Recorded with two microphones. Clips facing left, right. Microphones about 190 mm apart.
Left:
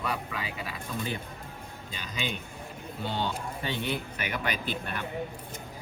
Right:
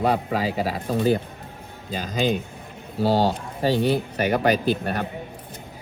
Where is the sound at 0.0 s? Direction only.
35° right (ahead or behind).